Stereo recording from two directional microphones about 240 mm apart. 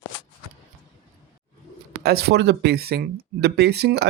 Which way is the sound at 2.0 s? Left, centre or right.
Right.